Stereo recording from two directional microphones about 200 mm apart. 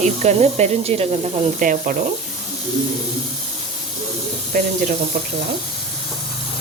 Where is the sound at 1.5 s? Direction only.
40° right (ahead or behind).